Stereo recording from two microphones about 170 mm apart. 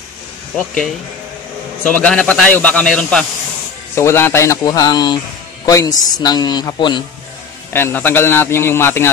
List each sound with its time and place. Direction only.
1.9 s a man's voice: 5° left (ahead or behind); by 7.0 s 25° left (ahead or behind)
7.7 s a man's voice: 10° left (ahead or behind)